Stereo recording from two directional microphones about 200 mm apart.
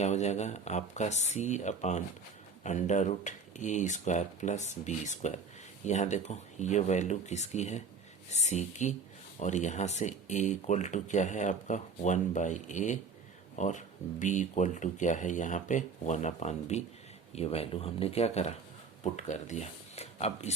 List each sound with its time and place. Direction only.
0.0 s speech: 35° left (ahead or behind)